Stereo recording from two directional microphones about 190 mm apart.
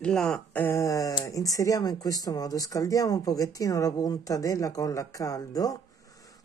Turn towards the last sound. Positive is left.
turn(degrees=20)  # may be behind; listen again after turning